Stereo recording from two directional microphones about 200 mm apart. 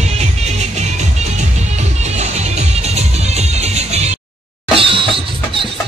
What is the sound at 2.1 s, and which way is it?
Music, 35° right (ahead or behind).